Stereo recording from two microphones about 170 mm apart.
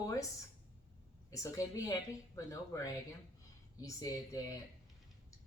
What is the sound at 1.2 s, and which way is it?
A woman's voice, 20° left (ahead or behind).